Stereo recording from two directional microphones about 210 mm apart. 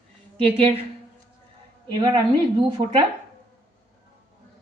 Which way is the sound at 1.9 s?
20° right (ahead or behind).